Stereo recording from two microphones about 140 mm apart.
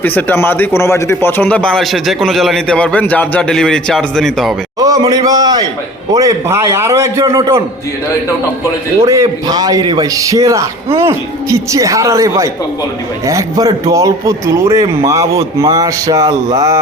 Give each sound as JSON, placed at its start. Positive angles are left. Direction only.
{"t": 0.0, "sound": "speech", "side_deg": 10}
{"t": 4.8, "sound": "a man's voice", "side_deg": -25}
{"t": 9.0, "sound": "a man's voice", "side_deg": -20}